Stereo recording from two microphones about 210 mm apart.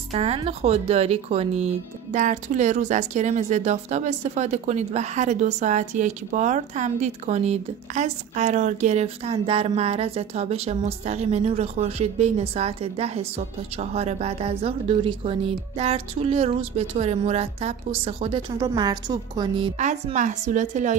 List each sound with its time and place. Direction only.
0.1 s speech: 30° right (ahead or behind)
19.8 s speech: 35° right (ahead or behind)